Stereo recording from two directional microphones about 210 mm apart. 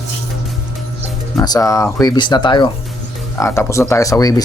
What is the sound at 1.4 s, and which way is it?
Speech, 15° left (ahead or behind).